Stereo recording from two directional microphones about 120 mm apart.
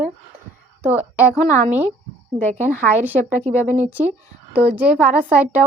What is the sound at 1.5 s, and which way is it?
Speech, 80° right.